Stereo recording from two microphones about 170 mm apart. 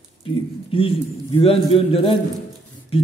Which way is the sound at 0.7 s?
30° left (ahead or behind).